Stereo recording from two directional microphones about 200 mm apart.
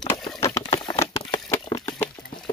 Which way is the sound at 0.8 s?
20° left (ahead or behind).